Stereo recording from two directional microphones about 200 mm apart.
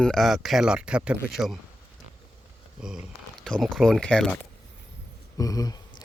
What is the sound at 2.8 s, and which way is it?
Speech, 5° right (ahead or behind).